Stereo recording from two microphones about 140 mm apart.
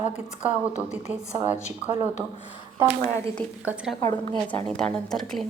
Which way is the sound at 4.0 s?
30° left (ahead or behind).